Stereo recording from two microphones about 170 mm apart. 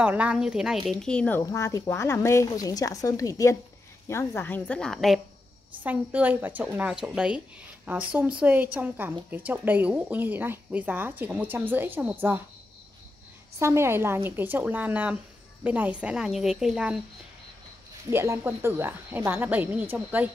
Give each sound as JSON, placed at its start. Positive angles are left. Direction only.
{"t": 0.0, "sound": "a woman's voice", "side_deg": -10}
{"t": 1.4, "sound": "a woman's voice", "side_deg": 20}
{"t": 5.9, "sound": "speech", "side_deg": -10}
{"t": 13.6, "sound": "a woman's voice", "side_deg": -15}
{"t": 18.1, "sound": "speech", "side_deg": -15}